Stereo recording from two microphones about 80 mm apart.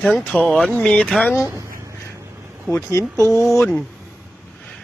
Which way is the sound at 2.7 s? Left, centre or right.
Right.